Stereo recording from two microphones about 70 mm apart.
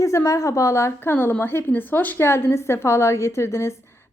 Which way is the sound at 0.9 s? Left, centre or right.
Left.